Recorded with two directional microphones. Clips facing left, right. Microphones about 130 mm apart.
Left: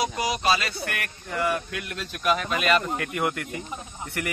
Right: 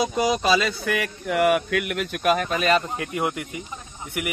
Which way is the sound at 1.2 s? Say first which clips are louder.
Right 7 dB; 75° right (ahead or behind).